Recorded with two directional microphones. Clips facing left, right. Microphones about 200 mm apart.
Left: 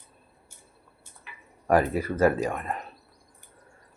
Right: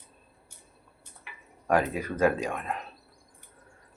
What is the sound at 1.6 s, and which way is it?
Speech, 5° left (ahead or behind).